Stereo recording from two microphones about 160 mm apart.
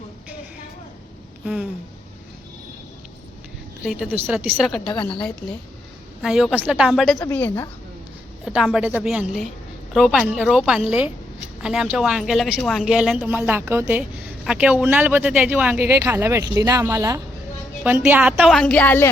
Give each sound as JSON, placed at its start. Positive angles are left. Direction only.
{"t": 3.8, "sound": "a woman's voice", "side_deg": 0}
{"t": 6.2, "sound": "a woman's voice", "side_deg": -5}
{"t": 7.2, "sound": "a woman's voice", "side_deg": 15}
{"t": 8.4, "sound": "a woman's voice", "side_deg": -5}